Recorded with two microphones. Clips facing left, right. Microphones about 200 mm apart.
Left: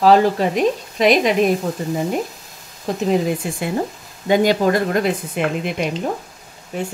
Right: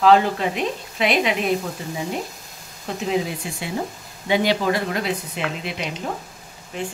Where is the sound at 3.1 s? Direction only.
50° left (ahead or behind).